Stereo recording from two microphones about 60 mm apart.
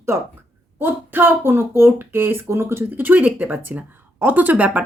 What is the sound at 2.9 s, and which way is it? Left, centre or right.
Speech, right.